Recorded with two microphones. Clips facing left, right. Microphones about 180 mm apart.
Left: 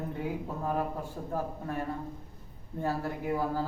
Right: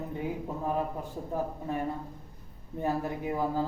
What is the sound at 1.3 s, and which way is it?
A man's voice, 15° right (ahead or behind).